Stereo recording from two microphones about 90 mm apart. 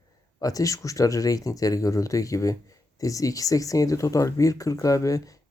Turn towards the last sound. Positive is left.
turn(degrees=40)  # may be behind; listen again after turning